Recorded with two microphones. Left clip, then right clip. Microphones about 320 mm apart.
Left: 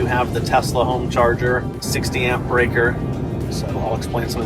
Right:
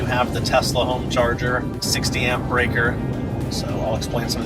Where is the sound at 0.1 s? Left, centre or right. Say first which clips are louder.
Right 2 dB; centre.